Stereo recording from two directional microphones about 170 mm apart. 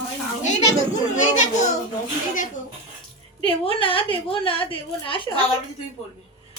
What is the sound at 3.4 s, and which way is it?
A woman's voice, 30° left (ahead or behind).